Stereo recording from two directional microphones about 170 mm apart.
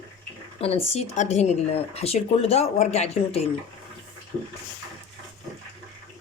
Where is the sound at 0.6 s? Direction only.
40° left (ahead or behind).